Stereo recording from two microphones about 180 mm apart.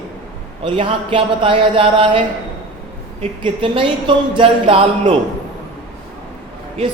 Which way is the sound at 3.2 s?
30° right (ahead or behind).